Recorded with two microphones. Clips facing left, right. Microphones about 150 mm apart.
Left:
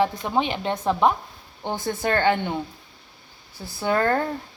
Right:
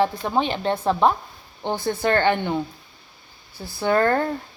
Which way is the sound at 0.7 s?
30° right (ahead or behind).